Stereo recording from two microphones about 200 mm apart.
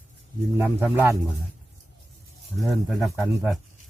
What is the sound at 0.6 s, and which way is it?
Speech, 10° right (ahead or behind).